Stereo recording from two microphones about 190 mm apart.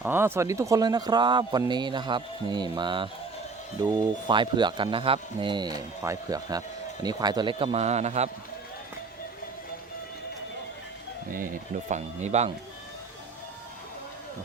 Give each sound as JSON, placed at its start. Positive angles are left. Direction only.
{"t": 0.0, "sound": "speech", "side_deg": -10}
{"t": 4.3, "sound": "speech", "side_deg": -25}
{"t": 11.3, "sound": "speech", "side_deg": -45}